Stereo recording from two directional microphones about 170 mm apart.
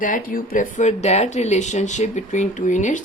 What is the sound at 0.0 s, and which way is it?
A woman's voice, 55° left (ahead or behind).